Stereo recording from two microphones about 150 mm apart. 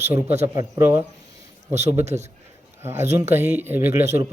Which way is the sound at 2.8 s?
15° right (ahead or behind).